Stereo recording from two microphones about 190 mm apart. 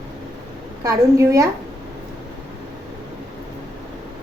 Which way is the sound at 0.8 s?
15° right (ahead or behind).